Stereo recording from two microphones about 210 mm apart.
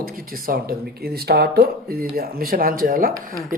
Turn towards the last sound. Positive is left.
turn(degrees=-40)  # may be behind; listen again after turning